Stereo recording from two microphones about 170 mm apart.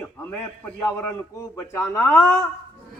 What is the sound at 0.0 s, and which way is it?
A man's voice, 10° left (ahead or behind).